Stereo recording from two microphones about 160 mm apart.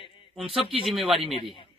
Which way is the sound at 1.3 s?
30° left (ahead or behind).